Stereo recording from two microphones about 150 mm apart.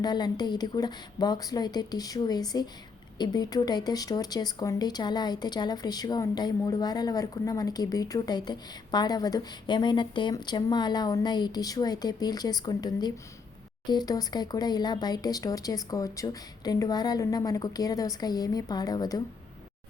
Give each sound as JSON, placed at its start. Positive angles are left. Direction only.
{"t": 0.0, "sound": "speech", "side_deg": 30}